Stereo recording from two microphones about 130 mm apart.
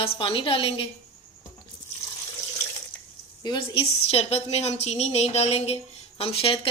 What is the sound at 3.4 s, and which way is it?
A woman's voice, 40° left (ahead or behind).